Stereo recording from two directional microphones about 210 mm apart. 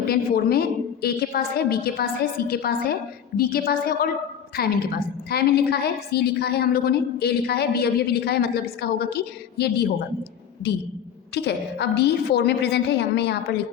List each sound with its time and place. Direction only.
0.1 s a woman's voice: 45° left (ahead or behind)
11.3 s a woman's voice: 50° left (ahead or behind)